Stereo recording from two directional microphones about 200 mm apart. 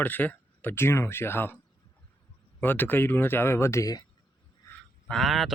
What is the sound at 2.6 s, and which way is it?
Speech, 10° left (ahead or behind).